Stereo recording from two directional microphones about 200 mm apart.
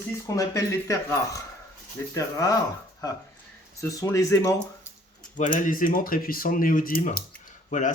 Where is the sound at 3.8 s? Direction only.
15° left (ahead or behind).